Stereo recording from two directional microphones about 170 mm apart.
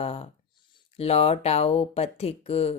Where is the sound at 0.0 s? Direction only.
35° left (ahead or behind).